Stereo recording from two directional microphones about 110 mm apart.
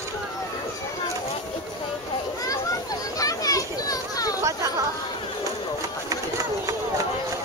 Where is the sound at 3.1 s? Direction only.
35° left (ahead or behind).